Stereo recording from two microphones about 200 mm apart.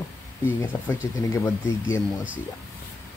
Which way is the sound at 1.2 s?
15° left (ahead or behind).